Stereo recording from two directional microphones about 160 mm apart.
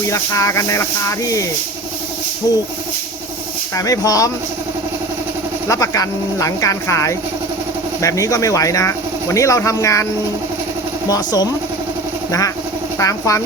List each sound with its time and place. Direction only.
0.1 s speech: 20° left (ahead or behind)
3.8 s speech: 20° left (ahead or behind)
5.6 s speech: 20° left (ahead or behind)
11.1 s speech: 25° left (ahead or behind)
13.0 s speech: 20° left (ahead or behind)